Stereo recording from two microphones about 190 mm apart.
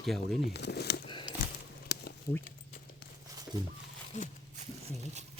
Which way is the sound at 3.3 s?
20° right (ahead or behind).